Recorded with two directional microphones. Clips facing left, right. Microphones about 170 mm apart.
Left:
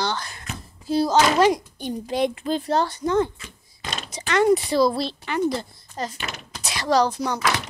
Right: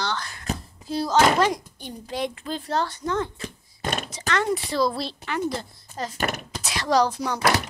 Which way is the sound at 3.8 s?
55° right (ahead or behind).